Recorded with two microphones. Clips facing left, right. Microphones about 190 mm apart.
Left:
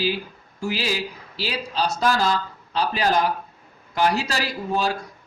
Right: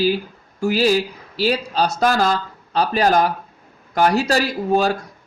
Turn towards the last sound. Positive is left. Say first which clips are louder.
# right 6 dB
turn(degrees=-45)  # may be behind; listen again after turning